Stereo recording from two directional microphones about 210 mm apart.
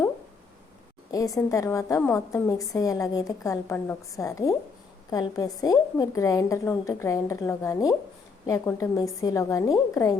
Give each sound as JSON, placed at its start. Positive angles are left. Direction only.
{"t": 1.1, "sound": "a woman's voice", "side_deg": 15}